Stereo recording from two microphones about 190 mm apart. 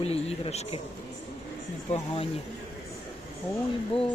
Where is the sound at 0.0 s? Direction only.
30° left (ahead or behind).